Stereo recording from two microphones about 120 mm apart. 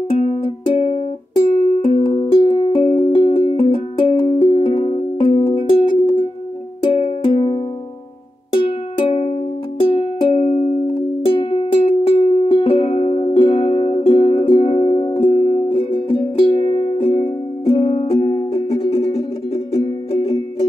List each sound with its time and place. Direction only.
0.1 s music: 50° left (ahead or behind)
10.9 s music: 45° left (ahead or behind)